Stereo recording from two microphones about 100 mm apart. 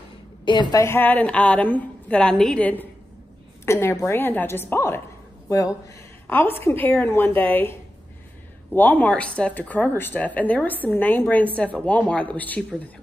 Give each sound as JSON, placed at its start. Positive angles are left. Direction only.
{"t": 0.5, "sound": "a woman's voice", "side_deg": 50}
{"t": 0.7, "sound": "speech", "side_deg": 25}
{"t": 3.6, "sound": "a woman's voice", "side_deg": 30}
{"t": 6.2, "sound": "a woman's voice", "side_deg": 25}